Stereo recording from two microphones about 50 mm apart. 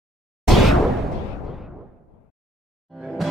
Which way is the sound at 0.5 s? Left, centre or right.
Centre.